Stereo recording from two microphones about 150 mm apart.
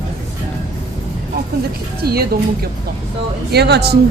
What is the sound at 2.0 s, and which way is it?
Speech, 90° right.